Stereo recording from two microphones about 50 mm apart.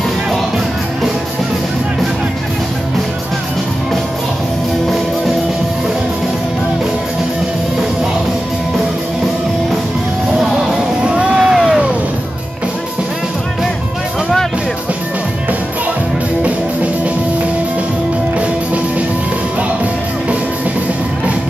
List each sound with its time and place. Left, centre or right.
11.0 s vehicle: centre